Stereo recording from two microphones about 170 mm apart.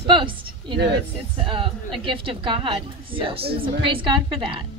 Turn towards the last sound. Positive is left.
turn(degrees=-30)  # may be behind; listen again after turning